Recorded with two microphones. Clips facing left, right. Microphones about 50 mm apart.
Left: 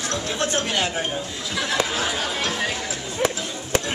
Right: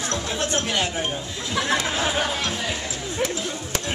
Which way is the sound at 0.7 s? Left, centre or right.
Left.